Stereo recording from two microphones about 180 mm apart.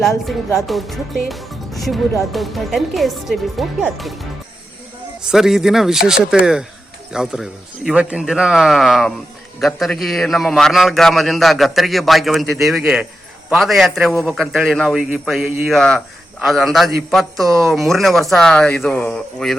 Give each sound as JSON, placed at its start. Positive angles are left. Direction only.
{"t": 0.7, "sound": "a man's voice", "side_deg": 0}
{"t": 5.3, "sound": "a man's voice", "side_deg": 0}